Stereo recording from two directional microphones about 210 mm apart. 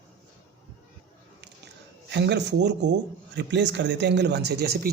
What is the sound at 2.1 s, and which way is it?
A man's voice, 55° right (ahead or behind).